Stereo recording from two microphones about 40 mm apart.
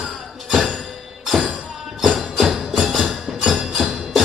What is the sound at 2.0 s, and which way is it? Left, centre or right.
Music, centre.